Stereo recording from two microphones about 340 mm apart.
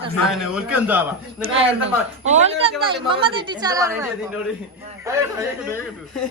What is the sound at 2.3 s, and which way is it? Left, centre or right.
A woman's voice, centre.